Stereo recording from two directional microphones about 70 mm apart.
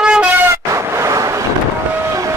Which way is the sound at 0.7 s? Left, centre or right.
Right.